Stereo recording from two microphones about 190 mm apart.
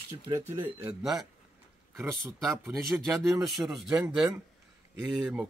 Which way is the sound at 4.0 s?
20° right (ahead or behind).